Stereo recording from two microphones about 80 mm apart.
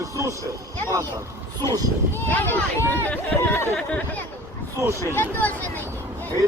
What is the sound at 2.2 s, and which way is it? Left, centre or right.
Speech, left.